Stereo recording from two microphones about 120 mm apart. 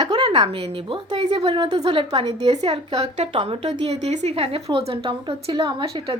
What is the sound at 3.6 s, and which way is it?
A woman's voice, 65° right (ahead or behind).